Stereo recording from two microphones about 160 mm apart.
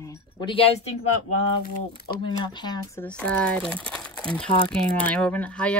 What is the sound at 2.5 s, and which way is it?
Speech, 25° left (ahead or behind).